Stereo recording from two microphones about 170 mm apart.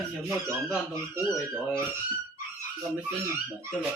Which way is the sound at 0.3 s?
15° right (ahead or behind).